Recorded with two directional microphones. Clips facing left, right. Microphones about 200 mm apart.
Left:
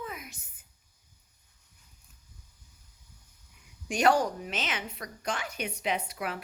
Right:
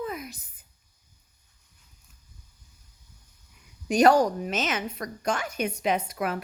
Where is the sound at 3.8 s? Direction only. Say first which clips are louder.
Right 6 dB; 40° right (ahead or behind).